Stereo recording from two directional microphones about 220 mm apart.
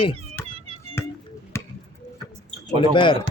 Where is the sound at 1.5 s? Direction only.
10° left (ahead or behind).